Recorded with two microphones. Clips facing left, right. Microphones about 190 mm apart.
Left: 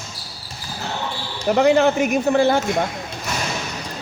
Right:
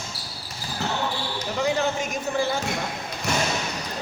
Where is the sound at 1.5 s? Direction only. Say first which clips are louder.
Left 10 dB; 65° left (ahead or behind).